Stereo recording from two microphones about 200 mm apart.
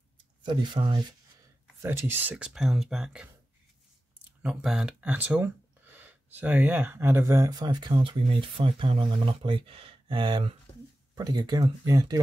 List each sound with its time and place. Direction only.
0.4 s speech: 25° right (ahead or behind)
1.8 s speech: 10° right (ahead or behind)